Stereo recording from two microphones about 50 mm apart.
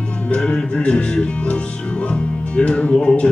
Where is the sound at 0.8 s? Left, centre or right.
Left.